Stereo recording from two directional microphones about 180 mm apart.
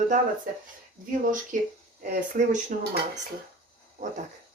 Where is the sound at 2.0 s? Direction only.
45° right (ahead or behind).